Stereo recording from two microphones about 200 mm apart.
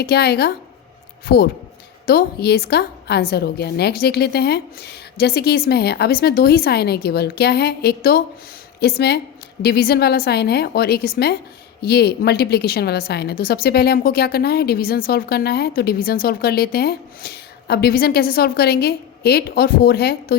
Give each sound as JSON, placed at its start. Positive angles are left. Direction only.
{"t": 0.0, "sound": "a woman's voice", "side_deg": 55}